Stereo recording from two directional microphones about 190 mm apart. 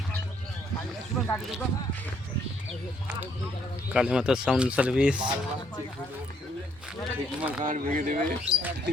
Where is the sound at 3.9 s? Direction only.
5° right (ahead or behind).